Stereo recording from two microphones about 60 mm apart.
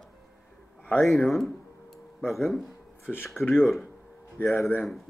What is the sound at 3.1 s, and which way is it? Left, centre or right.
Speech, left.